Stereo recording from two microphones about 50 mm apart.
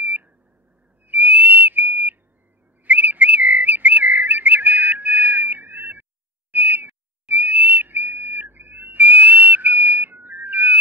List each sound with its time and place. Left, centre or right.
0.0 s beep: right
1.0 s whistle: right
2.8 s whistling: right
6.5 s a sound: right
7.2 s whistle: right